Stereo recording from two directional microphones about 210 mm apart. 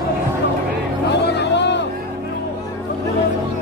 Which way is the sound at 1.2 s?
55° left (ahead or behind).